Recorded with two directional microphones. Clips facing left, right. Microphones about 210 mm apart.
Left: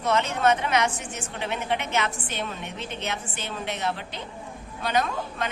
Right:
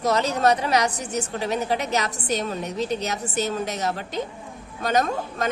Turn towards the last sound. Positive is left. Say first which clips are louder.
# right 3 dB
turn(degrees=-45)  # may be behind; listen again after turning